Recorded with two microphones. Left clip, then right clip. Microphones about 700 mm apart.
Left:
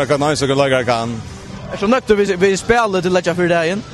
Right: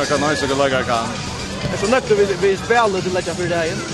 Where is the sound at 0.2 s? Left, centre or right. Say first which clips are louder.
Left 2 dB; left.